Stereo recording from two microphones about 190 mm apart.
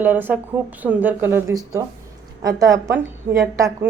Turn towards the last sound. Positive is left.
turn(degrees=-10)  # may be behind; listen again after turning